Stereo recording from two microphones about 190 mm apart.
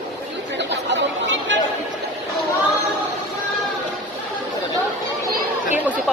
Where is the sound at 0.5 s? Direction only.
70° right (ahead or behind).